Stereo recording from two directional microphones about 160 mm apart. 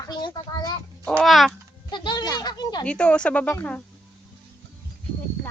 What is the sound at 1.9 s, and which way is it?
Speech, 30° left (ahead or behind).